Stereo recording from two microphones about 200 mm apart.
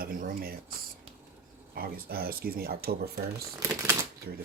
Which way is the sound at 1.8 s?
50° right (ahead or behind).